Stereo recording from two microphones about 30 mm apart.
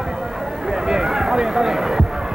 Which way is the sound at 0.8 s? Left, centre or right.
Centre.